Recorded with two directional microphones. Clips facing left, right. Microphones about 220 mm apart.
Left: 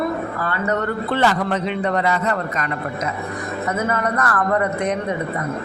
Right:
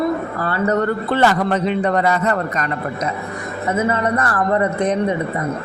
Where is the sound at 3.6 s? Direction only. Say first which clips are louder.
Right 4 dB; 30° right (ahead or behind).